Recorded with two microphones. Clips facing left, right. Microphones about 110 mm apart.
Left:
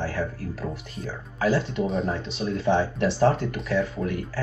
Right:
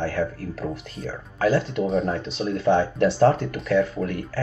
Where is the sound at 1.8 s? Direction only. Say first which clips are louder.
Right 3 dB; centre (ahead or behind).